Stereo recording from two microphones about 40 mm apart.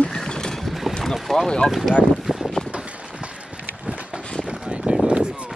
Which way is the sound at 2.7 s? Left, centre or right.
Right.